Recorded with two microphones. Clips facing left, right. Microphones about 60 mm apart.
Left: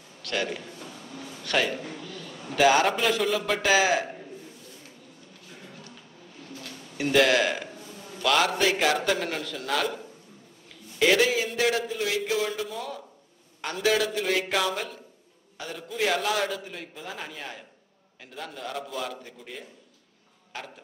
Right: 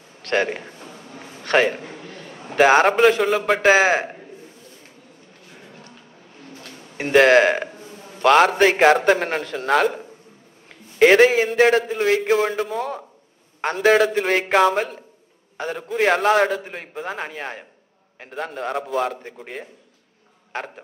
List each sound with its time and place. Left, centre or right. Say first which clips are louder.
0.2 s a man's voice: right 8 dB; right
5.7 s a sound: right 2 dB; right
6.4 s a man's voice: right 1 dB; right